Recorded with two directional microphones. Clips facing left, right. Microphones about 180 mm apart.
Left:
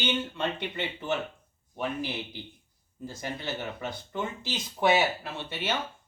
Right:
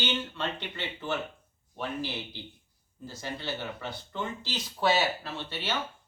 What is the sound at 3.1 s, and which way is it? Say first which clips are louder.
Speech: left 1 dB; 15° left (ahead or behind).